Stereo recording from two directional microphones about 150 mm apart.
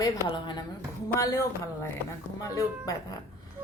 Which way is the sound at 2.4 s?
20° left (ahead or behind).